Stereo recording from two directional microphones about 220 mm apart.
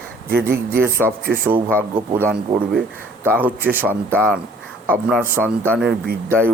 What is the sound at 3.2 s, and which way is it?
A man's voice, 10° right (ahead or behind).